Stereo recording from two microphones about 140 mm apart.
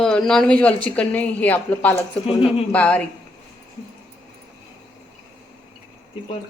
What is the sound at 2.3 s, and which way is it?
Speech, 45° left (ahead or behind).